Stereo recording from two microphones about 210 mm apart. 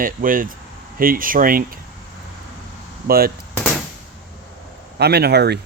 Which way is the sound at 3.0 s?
45° right (ahead or behind).